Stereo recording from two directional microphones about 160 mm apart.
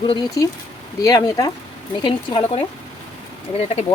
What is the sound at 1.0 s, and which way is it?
Speech, 20° left (ahead or behind).